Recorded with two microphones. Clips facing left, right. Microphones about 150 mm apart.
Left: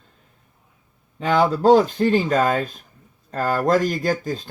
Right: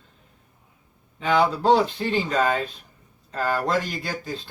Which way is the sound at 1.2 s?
45° left (ahead or behind).